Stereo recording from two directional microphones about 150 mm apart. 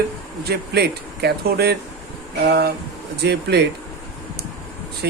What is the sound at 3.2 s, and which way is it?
Speech, 90° right.